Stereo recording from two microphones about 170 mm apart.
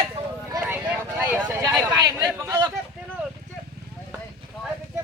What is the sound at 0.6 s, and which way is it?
Vehicle, 10° right (ahead or behind).